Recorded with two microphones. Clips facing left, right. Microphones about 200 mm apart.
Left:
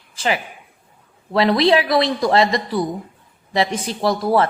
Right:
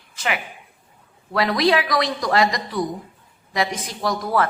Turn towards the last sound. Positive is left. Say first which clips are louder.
# left 4 dB
turn(degrees=30)  # may be behind; listen again after turning